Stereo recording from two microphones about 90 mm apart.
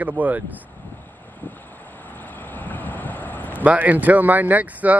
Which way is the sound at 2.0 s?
20° left (ahead or behind).